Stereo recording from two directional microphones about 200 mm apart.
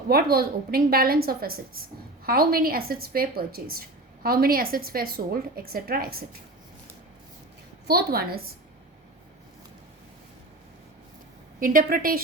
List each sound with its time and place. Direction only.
0.1 s a woman's voice: 50° right (ahead or behind)
7.9 s a woman's voice: 50° right (ahead or behind)
11.6 s a woman's voice: 45° right (ahead or behind)